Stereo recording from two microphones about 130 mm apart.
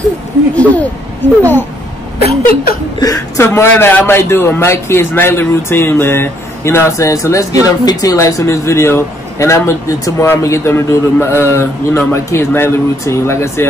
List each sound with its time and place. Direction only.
0.6 s speech: 10° left (ahead or behind)
3.0 s speech: 25° left (ahead or behind)